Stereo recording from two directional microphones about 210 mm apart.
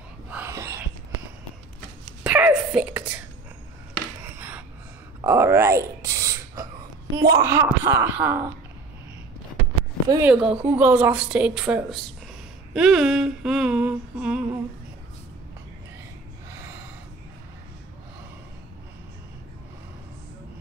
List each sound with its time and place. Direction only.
0.3 s a sound: 10° right (ahead or behind)
2.2 s whispering: 5° right (ahead or behind)
4.2 s a sound: 10° right (ahead or behind)
7.2 s speech: 15° right (ahead or behind)
10.0 s speech: 15° right (ahead or behind)
10.3 s humming: 5° right (ahead or behind)